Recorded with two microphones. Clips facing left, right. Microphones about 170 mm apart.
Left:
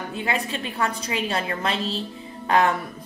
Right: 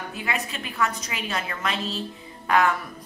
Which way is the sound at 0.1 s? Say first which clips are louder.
Left 5 dB; 30° left (ahead or behind).